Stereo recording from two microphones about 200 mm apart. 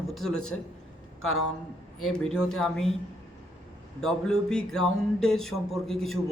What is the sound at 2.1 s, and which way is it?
Speech, 5° left (ahead or behind).